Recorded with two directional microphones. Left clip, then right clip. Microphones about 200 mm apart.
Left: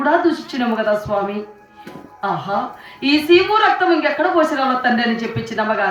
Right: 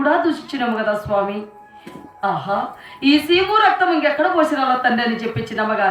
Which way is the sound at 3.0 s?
25° right (ahead or behind).